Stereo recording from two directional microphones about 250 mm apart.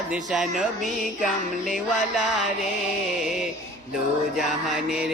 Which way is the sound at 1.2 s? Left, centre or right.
Centre.